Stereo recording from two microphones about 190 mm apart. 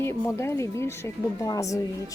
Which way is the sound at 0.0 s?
15° left (ahead or behind).